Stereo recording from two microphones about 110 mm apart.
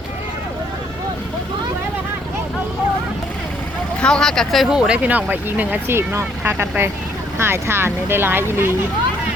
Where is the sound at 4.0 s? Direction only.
5° left (ahead or behind); by 8.7 s 20° right (ahead or behind).